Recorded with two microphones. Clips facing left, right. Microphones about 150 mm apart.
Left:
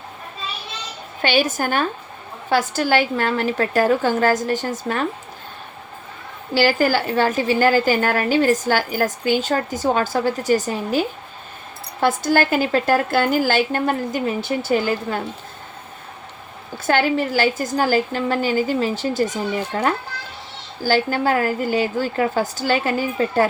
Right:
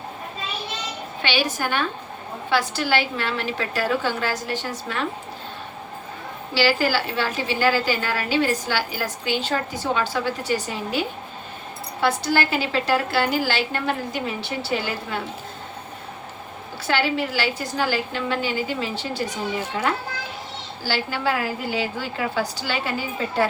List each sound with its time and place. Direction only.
1.2 s a woman's voice: 45° left (ahead or behind)
6.5 s a woman's voice: 45° left (ahead or behind)
16.7 s a woman's voice: 45° left (ahead or behind)